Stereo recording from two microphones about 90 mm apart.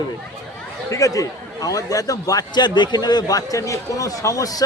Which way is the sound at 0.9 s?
35° left (ahead or behind).